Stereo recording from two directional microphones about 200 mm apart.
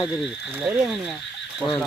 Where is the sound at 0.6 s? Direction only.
5° right (ahead or behind).